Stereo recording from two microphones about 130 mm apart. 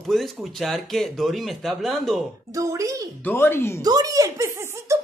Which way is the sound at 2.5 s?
25° right (ahead or behind).